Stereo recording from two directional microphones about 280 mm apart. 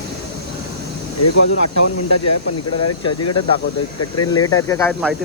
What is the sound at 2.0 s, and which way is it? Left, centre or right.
Speech, left.